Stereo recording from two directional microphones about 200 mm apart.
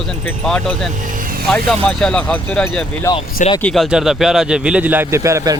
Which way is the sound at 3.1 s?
15° left (ahead or behind).